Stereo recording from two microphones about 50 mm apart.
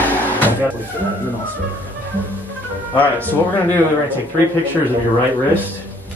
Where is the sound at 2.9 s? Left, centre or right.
Left.